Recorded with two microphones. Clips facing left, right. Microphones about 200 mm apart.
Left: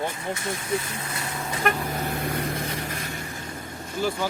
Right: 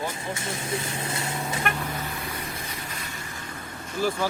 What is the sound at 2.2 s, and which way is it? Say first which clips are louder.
Vehicle: left 7 dB; 60° left (ahead or behind).